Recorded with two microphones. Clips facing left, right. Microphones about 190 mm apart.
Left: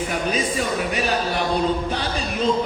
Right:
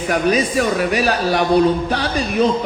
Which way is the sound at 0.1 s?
65° right (ahead or behind).